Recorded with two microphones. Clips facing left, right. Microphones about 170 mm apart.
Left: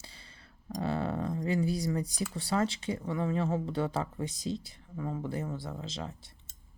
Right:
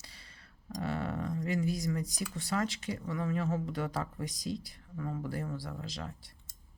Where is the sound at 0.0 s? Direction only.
30° left (ahead or behind).